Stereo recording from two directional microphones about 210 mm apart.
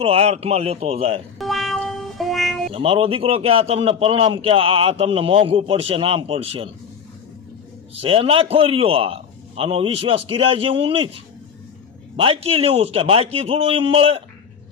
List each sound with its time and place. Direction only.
0.0 s a man's voice: 30° right (ahead or behind)
1.4 s music: centre (ahead or behind)
2.7 s a man's voice: 25° right (ahead or behind)
8.0 s a man's voice: 25° right (ahead or behind)